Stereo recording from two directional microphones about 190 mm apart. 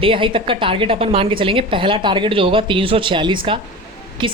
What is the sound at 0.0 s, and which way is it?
A woman's voice, 25° right (ahead or behind).